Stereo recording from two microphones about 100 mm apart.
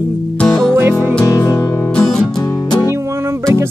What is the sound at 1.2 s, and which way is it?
Music, 40° left (ahead or behind).